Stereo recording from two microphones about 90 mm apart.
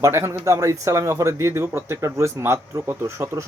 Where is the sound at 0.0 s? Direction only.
30° right (ahead or behind).